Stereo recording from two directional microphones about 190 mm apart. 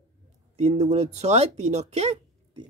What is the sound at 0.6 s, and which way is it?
Speech, 35° right (ahead or behind).